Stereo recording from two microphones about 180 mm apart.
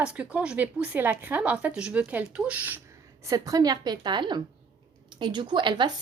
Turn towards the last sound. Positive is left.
turn(degrees=-25)  # may be behind; listen again after turning